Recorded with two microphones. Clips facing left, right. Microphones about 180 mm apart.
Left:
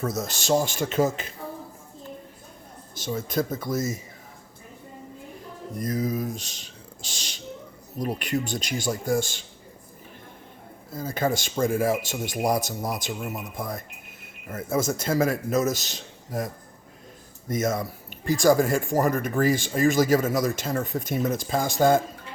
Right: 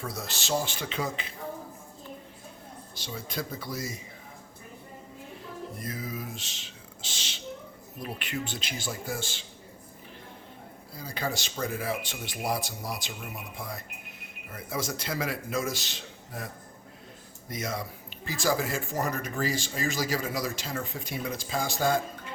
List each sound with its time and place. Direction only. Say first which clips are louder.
0.0 s speech: left 8 dB; 45° left (ahead or behind)
3.0 s speech: left 9 dB; 45° left (ahead or behind)
5.7 s speech: left 13 dB; 40° left (ahead or behind)
10.9 s speech: left 8 dB; 50° left (ahead or behind)
17.5 s speech: left 9 dB; 45° left (ahead or behind)